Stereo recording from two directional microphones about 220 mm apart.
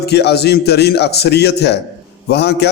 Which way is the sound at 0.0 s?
50° left (ahead or behind).